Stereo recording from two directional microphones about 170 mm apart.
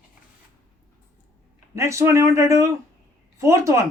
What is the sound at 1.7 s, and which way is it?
A woman's voice, 15° right (ahead or behind).